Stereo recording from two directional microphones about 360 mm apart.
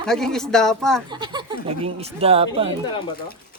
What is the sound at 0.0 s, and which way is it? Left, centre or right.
Speech, centre.